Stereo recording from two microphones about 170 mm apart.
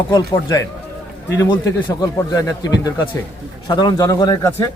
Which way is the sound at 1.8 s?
20° left (ahead or behind).